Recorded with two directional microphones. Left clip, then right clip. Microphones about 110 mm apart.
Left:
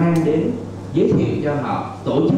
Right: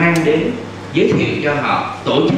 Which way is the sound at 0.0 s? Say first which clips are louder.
Right 5 dB; 30° right (ahead or behind).